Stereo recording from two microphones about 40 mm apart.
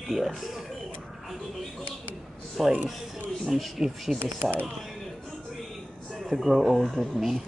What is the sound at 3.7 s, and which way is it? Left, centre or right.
Speech, centre.